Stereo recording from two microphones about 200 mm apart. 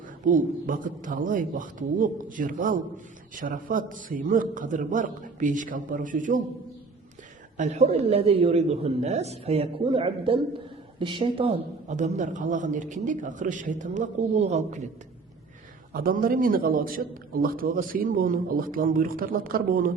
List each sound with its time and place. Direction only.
0.3 s a man's voice: 40° right (ahead or behind)
7.5 s a man's voice: 35° right (ahead or behind)
15.9 s a man's voice: 45° right (ahead or behind)